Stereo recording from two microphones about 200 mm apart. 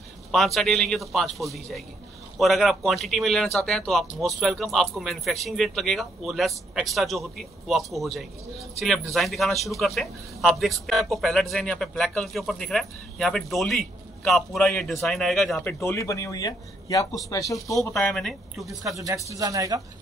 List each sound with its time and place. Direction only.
0.6 s a man's voice: centre (ahead or behind)
15.8 s speech: 15° left (ahead or behind)
17.9 s a man's voice: centre (ahead or behind)
18.8 s speech: 15° right (ahead or behind)